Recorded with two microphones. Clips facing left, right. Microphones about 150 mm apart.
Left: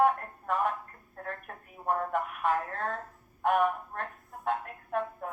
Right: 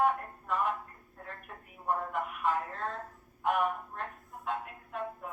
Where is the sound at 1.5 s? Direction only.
55° left (ahead or behind).